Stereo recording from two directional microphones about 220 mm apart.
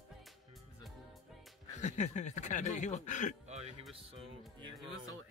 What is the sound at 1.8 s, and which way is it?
Speech, 30° left (ahead or behind).